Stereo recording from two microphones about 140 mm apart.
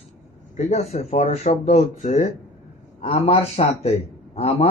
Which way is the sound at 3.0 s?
45° left (ahead or behind).